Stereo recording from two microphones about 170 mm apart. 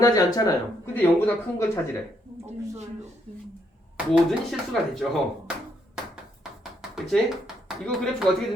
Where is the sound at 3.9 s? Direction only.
5° right (ahead or behind).